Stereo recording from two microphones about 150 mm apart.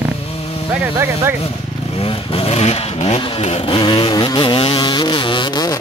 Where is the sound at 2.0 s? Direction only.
40° left (ahead or behind).